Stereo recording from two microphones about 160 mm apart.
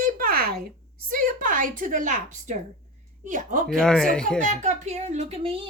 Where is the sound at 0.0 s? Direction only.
60° right (ahead or behind).